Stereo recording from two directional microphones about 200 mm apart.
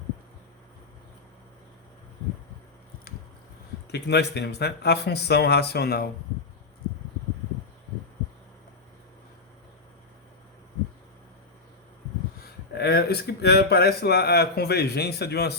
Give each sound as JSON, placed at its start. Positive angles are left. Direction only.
{"t": 3.9, "sound": "speech", "side_deg": 55}
{"t": 12.7, "sound": "a man's voice", "side_deg": 55}